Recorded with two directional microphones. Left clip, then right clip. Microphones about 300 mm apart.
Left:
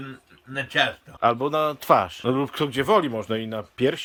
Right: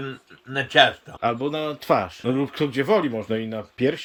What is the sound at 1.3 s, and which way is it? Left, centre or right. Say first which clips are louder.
Speech: left 3 dB; centre.